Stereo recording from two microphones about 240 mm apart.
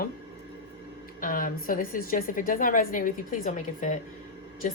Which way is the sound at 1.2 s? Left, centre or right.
Left.